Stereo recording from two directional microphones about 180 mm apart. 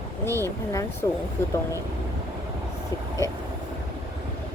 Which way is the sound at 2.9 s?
20° left (ahead or behind).